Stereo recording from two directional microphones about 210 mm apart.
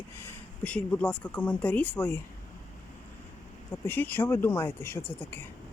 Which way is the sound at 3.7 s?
10° left (ahead or behind).